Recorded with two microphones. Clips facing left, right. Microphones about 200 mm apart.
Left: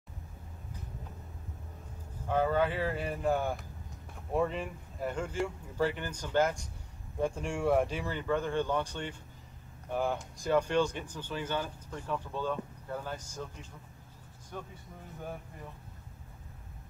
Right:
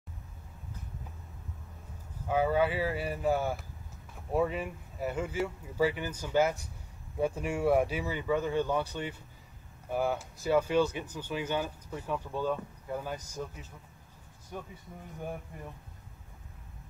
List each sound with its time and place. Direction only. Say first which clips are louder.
2.2 s speech: right 1 dB; 10° right (ahead or behind)
9.8 s speech: right 1 dB; 10° right (ahead or behind)